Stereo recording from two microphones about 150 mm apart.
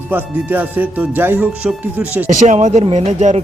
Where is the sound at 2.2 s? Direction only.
55° right (ahead or behind).